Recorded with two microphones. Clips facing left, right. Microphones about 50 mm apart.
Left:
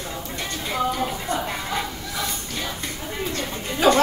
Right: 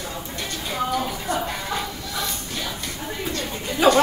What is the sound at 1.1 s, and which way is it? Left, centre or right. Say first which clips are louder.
Music: even; left.